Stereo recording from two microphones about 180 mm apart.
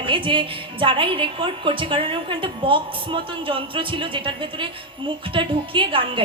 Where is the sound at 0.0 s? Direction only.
30° right (ahead or behind).